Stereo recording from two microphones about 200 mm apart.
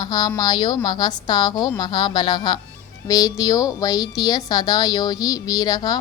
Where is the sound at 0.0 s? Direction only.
20° left (ahead or behind).